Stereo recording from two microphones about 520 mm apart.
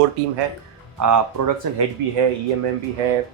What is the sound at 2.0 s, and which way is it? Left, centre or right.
Speech, right.